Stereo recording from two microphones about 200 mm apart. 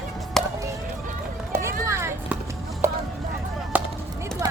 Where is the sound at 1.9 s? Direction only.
15° right (ahead or behind).